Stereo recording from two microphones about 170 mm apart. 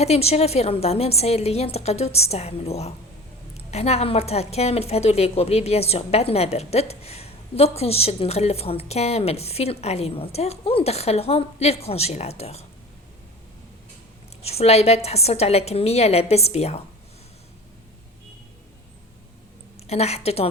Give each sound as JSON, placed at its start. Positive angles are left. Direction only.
{"t": 0.0, "sound": "a woman's voice", "side_deg": 40}
{"t": 14.4, "sound": "a woman's voice", "side_deg": 35}
{"t": 19.9, "sound": "a woman's voice", "side_deg": 40}